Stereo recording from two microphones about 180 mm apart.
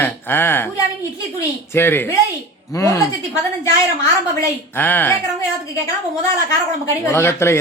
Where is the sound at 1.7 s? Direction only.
10° left (ahead or behind).